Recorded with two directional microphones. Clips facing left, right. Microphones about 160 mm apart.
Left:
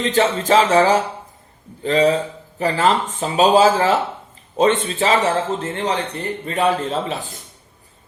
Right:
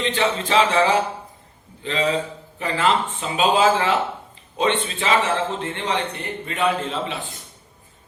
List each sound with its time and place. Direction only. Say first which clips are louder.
0.0 s speech: left 4 dB; 40° left (ahead or behind)